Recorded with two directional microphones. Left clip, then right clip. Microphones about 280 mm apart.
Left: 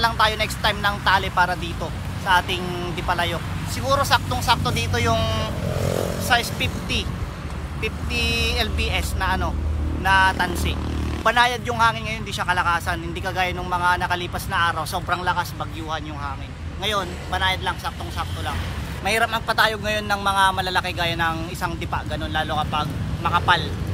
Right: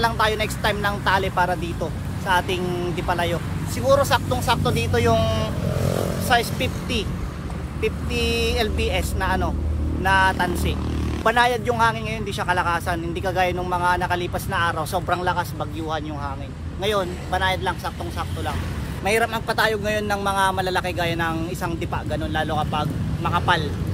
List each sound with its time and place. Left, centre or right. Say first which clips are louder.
0.0 s a man's voice: left 1 dB; centre
5.7 s vehicle: left 1 dB; left
6.2 s speech: right 1 dB; centre
16.8 s speech: right 1 dB; centre
19.0 s a man's voice: even; centre